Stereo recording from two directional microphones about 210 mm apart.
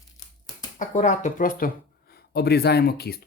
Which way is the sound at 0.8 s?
35° left (ahead or behind).